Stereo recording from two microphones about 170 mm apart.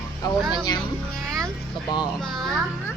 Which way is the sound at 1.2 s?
5° left (ahead or behind).